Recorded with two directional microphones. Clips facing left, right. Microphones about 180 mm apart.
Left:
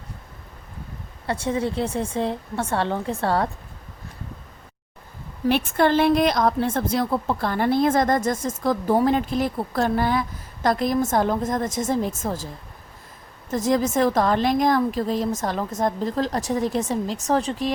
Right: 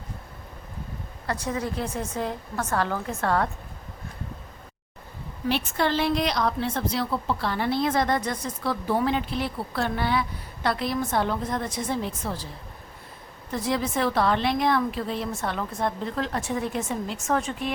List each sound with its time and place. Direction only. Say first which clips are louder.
1.3 s a woman's voice: left 5 dB; 30° left (ahead or behind)
5.5 s a woman's voice: left 6 dB; 50° left (ahead or behind)
13.5 s a woman's voice: left 6 dB; 45° left (ahead or behind)